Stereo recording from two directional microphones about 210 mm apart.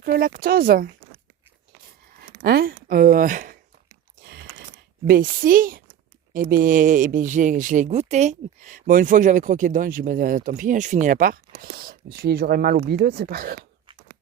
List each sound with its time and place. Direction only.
0.0 s speech: 45° right (ahead or behind)
2.4 s speech: 45° right (ahead or behind)
4.2 s a sound: 45° right (ahead or behind)
5.0 s speech: 45° right (ahead or behind)